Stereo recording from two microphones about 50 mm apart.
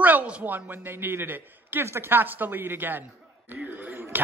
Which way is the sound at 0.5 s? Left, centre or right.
Right.